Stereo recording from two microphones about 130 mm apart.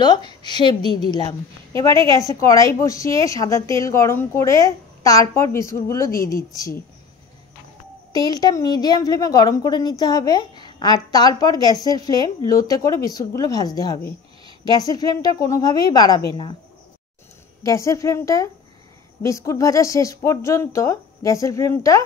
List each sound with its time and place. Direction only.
0.0 s a woman's voice: 35° left (ahead or behind)
8.1 s a woman's voice: 30° left (ahead or behind)
17.6 s a woman's voice: 25° left (ahead or behind)